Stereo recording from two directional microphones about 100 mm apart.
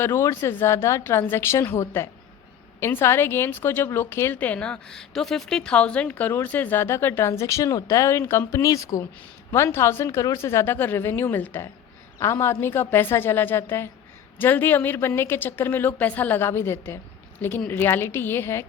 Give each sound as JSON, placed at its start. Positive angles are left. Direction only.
{"t": 0.0, "sound": "a woman's voice", "side_deg": 25}